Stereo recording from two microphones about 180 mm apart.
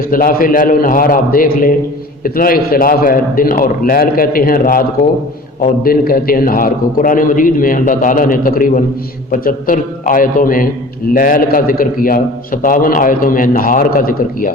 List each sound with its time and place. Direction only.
0.1 s a man's voice: 50° left (ahead or behind)